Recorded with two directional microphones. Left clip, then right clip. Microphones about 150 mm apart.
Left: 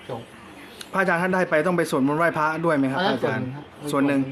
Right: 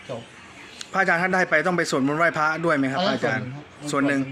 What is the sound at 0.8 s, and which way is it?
A man's voice, 15° left (ahead or behind).